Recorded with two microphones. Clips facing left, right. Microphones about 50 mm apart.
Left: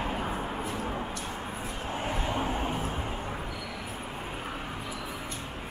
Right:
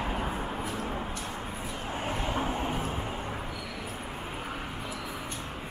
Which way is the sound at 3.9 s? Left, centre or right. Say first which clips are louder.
Even; centre.